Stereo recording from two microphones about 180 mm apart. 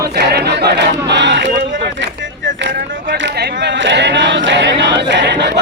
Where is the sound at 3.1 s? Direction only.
75° right (ahead or behind).